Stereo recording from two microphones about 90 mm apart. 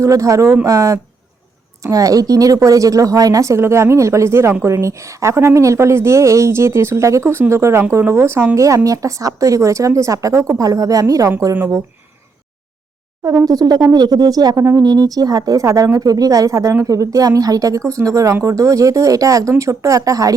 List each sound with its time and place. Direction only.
0.0 s speech: 35° right (ahead or behind)
13.2 s speech: 45° right (ahead or behind)
14.8 s speech: 50° right (ahead or behind)